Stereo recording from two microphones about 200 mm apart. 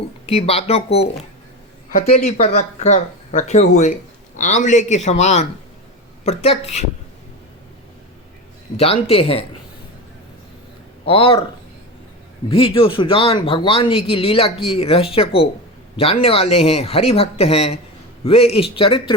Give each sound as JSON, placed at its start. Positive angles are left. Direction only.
{"t": 0.3, "sound": "a man's voice", "side_deg": 30}
{"t": 2.0, "sound": "speech", "side_deg": 35}
{"t": 8.7, "sound": "a man's voice", "side_deg": 30}
{"t": 11.0, "sound": "a man's voice", "side_deg": 25}
{"t": 12.5, "sound": "a man's voice", "side_deg": 25}